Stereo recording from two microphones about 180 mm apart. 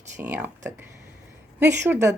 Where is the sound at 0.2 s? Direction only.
10° right (ahead or behind).